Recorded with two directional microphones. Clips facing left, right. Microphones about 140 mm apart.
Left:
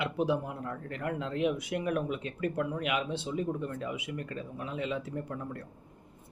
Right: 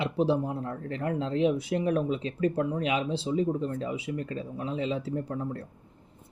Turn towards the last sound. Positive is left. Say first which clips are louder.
# right 5 dB
turn(degrees=-30)  # may be behind; listen again after turning